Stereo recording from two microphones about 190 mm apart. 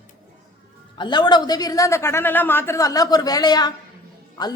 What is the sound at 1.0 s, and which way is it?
Speech, 25° left (ahead or behind).